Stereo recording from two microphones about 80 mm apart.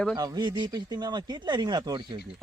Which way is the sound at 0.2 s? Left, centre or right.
Right.